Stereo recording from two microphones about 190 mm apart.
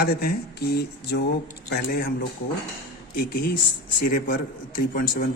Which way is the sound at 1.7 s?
50° left (ahead or behind).